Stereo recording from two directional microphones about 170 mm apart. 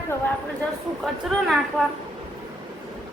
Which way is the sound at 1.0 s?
Centre (ahead or behind).